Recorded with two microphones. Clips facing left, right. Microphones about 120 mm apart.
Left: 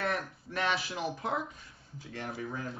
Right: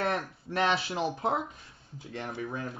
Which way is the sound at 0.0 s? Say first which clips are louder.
Right 3 dB; 25° right (ahead or behind).